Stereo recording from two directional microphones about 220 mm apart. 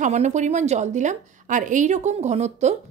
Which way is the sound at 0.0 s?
30° right (ahead or behind).